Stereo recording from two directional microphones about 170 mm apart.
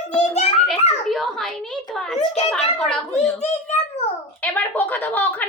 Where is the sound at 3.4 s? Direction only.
40° left (ahead or behind).